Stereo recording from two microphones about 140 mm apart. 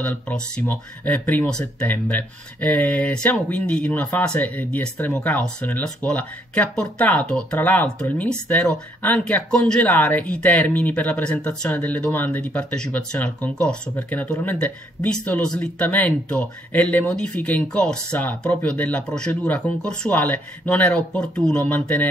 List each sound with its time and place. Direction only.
0.0 s speech: 10° left (ahead or behind)